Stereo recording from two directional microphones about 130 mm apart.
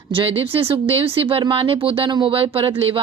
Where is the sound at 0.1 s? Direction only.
45° right (ahead or behind).